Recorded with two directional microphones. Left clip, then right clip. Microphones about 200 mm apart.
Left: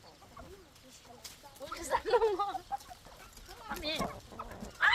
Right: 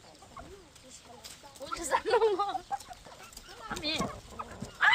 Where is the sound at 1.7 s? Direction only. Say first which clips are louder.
Right 2 dB; 20° right (ahead or behind).